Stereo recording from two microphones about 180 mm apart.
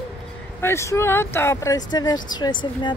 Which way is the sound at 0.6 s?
15° left (ahead or behind).